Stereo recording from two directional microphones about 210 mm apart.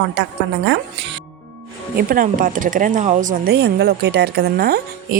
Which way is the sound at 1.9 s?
40° right (ahead or behind).